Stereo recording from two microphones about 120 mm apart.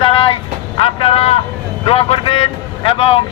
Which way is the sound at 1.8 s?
50° left (ahead or behind).